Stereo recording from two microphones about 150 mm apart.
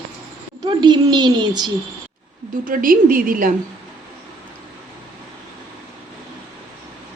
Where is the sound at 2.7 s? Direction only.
70° right (ahead or behind).